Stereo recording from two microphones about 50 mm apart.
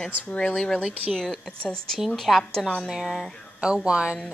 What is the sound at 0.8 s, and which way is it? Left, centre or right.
Speech, centre.